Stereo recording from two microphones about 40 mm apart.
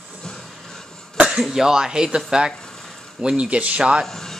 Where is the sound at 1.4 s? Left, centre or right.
Centre.